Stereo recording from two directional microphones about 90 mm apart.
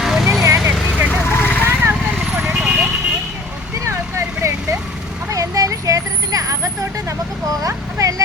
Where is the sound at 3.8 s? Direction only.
35° right (ahead or behind).